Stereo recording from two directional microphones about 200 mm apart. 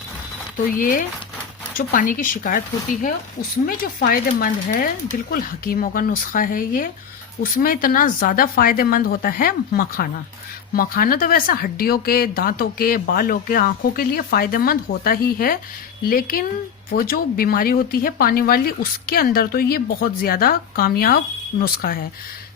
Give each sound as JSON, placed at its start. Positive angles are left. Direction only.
{"t": 0.7, "sound": "speech", "side_deg": 45}